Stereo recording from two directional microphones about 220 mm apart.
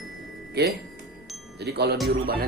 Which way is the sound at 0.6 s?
45° right (ahead or behind).